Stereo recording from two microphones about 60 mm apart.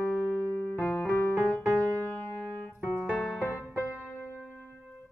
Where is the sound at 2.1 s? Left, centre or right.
Left.